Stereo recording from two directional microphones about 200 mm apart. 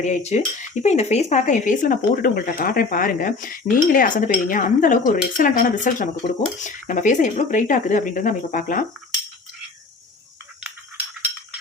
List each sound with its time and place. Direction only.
0.0 s speech: 35° left (ahead or behind)